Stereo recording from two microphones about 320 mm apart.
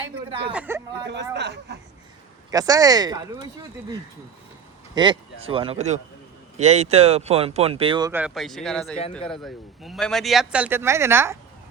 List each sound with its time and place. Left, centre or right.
0.5 s speech: centre
1.3 s speech: right
2.5 s speech: centre
4.9 s speech: centre